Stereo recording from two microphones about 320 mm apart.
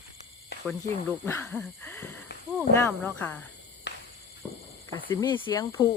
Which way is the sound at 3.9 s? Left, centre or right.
Left.